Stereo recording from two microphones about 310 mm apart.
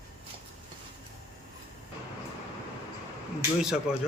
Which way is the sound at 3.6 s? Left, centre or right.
Centre.